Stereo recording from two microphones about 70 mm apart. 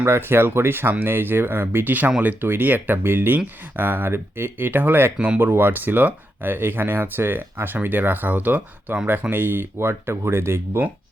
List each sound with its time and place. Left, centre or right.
0.0 s speech: right